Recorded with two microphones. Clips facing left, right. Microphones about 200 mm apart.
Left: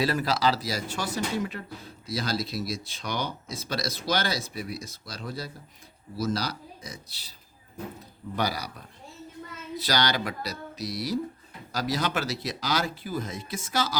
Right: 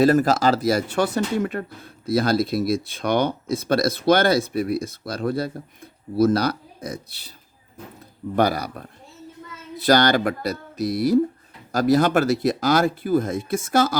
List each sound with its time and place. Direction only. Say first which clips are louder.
0.0 s speech: right 9 dB; 45° right (ahead or behind)
8.4 s speech: right 9 dB; 55° right (ahead or behind)